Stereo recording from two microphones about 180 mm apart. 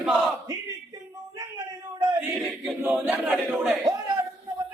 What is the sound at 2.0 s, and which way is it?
Male singing, 20° right (ahead or behind).